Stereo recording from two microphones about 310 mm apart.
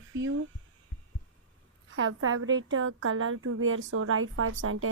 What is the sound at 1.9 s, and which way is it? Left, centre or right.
A woman's voice, right.